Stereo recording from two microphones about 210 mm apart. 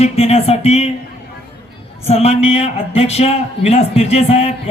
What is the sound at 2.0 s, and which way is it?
A man's voice, 30° left (ahead or behind).